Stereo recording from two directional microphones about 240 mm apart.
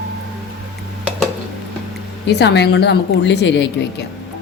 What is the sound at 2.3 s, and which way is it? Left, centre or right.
Speech, left.